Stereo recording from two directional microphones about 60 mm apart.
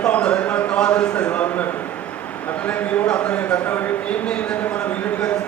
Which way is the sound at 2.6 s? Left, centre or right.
Left.